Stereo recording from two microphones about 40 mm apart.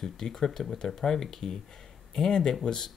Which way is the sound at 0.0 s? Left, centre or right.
Centre.